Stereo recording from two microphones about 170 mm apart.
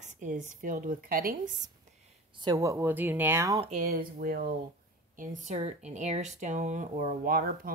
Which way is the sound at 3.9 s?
60° right (ahead or behind).